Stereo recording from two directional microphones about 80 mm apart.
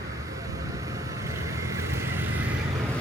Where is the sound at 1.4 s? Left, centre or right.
Right.